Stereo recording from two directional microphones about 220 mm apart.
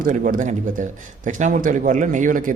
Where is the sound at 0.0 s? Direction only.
40° right (ahead or behind).